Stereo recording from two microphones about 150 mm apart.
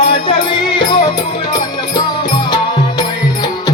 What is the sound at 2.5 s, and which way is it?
Music, 30° left (ahead or behind).